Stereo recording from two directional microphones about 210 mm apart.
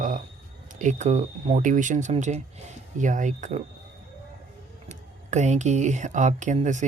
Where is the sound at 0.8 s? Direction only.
35° right (ahead or behind).